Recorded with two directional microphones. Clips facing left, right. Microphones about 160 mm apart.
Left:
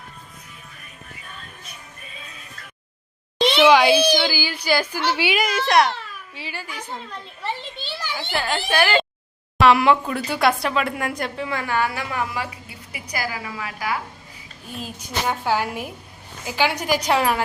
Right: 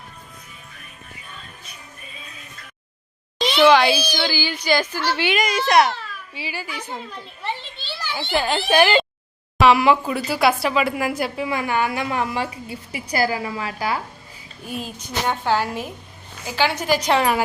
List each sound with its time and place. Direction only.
3.5 s a woman's voice: 15° left (ahead or behind); by 9.0 s 15° right (ahead or behind)
9.6 s speech: centre (ahead or behind); by 14.0 s 30° right (ahead or behind)
14.7 s a woman's voice: centre (ahead or behind)